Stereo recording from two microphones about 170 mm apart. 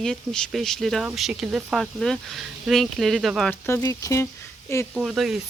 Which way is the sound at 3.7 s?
20° left (ahead or behind).